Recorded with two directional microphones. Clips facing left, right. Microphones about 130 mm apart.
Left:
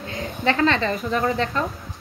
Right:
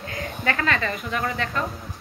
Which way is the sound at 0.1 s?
25° left (ahead or behind).